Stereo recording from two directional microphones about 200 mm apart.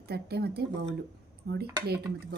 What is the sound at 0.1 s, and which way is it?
A woman's voice, 55° right (ahead or behind).